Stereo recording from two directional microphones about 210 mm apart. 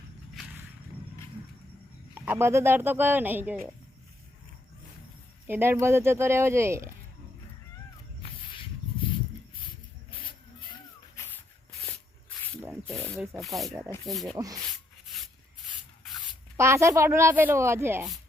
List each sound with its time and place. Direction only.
2.1 s a woman's voice: 10° right (ahead or behind)
5.5 s a woman's voice: 10° right (ahead or behind)
8.2 s snake: 25° left (ahead or behind)
12.9 s a sound: centre (ahead or behind)
14.1 s rub: centre (ahead or behind)
14.3 s a woman's voice: 15° right (ahead or behind)
16.6 s a woman's voice: 15° right (ahead or behind)